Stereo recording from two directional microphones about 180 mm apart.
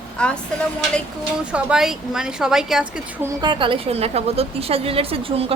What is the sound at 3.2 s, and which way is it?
A woman's voice, 20° right (ahead or behind).